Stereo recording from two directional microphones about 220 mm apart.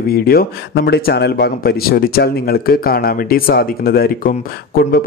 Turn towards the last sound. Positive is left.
turn(degrees=45)  # may be behind; listen again after turning